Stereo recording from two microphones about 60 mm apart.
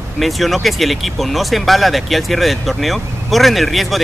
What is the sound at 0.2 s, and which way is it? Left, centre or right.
Speech, centre.